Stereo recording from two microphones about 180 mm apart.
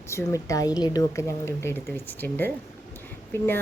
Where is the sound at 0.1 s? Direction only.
15° left (ahead or behind).